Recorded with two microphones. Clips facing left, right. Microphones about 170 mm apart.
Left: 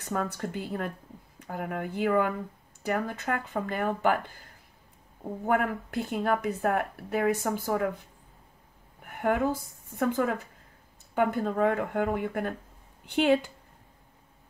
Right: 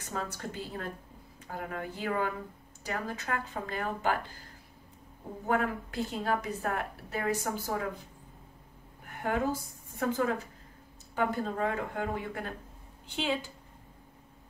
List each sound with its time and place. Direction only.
0.0 s speech: 55° left (ahead or behind)
5.5 s speech: 55° left (ahead or behind)
9.2 s a woman's voice: 55° left (ahead or behind)